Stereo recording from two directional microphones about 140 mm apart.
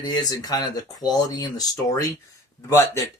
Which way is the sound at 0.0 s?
30° left (ahead or behind).